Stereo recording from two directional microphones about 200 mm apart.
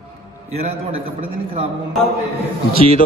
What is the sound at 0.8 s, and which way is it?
Speech, 30° right (ahead or behind).